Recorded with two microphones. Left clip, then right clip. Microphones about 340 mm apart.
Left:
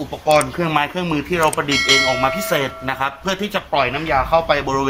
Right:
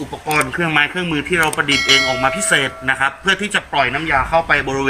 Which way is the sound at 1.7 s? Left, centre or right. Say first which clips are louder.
Right 2 dB; centre.